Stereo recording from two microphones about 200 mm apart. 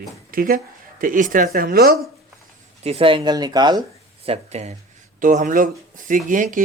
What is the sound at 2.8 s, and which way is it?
Speech, 30° right (ahead or behind).